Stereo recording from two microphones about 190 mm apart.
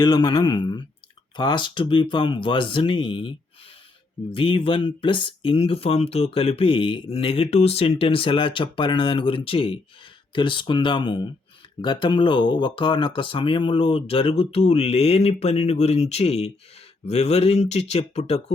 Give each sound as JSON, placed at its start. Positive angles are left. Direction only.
{"t": 0.0, "sound": "speech", "side_deg": 20}